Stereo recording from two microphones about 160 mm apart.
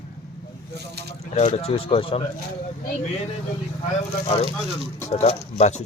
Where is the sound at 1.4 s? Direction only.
45° left (ahead or behind).